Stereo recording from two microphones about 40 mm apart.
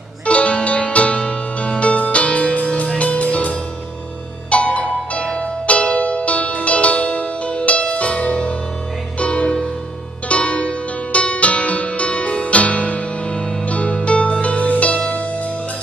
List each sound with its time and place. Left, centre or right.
0.3 s music: left